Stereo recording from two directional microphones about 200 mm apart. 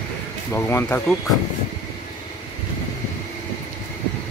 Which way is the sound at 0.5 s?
15° left (ahead or behind).